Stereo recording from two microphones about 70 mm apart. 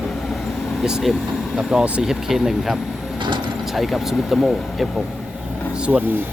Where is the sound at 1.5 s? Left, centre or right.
Centre.